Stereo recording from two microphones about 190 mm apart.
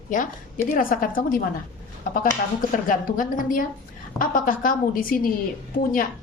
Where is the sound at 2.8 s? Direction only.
45° left (ahead or behind).